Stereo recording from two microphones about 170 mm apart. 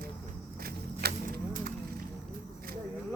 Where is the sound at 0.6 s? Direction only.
65° right (ahead or behind).